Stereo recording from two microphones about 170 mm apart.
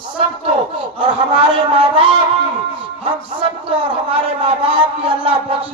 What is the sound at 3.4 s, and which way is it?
A man's voice, 30° right (ahead or behind).